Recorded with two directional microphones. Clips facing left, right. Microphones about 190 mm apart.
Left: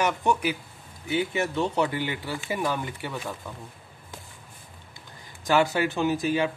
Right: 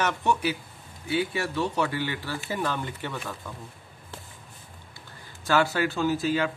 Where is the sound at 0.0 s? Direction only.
15° left (ahead or behind).